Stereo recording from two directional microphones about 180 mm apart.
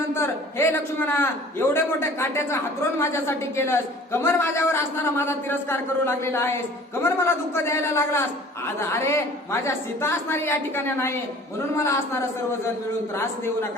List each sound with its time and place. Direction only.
0.1 s a man's voice: 15° left (ahead or behind)